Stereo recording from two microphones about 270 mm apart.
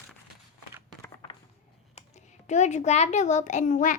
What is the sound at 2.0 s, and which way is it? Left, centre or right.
A child's voice, left.